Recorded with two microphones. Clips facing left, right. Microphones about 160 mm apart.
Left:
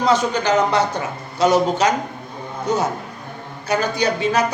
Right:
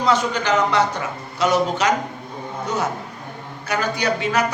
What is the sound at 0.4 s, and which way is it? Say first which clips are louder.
A man's voice: even; 40° left (ahead or behind).